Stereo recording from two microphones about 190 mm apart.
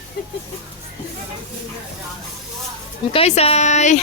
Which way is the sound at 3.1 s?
30° left (ahead or behind).